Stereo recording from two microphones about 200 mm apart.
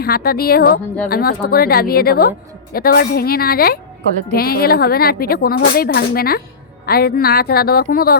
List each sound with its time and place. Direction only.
0.0 s a woman's voice: 50° left (ahead or behind)